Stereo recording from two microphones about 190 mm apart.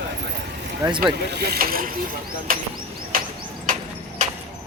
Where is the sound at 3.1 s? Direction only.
45° right (ahead or behind).